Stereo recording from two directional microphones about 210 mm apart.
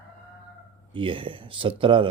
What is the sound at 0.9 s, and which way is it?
Speech, 25° right (ahead or behind).